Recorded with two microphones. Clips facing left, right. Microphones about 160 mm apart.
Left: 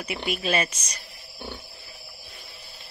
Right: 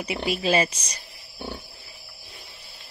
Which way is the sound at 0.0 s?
30° right (ahead or behind).